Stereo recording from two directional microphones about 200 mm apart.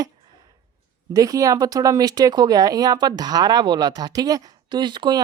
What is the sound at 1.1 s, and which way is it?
Speech, 15° right (ahead or behind).